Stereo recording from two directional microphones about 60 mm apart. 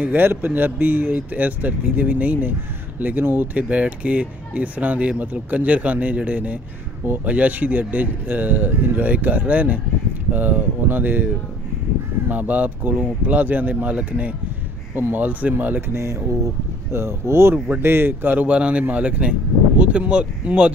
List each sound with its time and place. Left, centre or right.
0.0 s speech: right
12.3 s speech: right
15.9 s speech: right
17.6 s speech: right; by 20.7 s centre